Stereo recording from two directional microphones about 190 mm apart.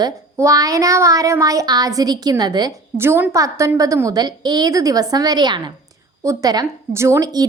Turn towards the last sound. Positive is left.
turn(degrees=-20)  # may be behind; listen again after turning